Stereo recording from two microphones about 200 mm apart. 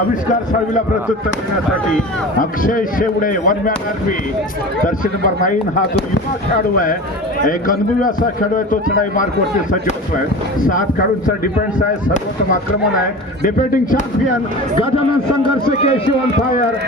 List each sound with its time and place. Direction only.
2.4 s a man's voice: 45° left (ahead or behind)
4.9 s speech: 40° left (ahead or behind)
7.4 s a man's voice: 45° left (ahead or behind)
10.7 s a man's voice: 40° left (ahead or behind)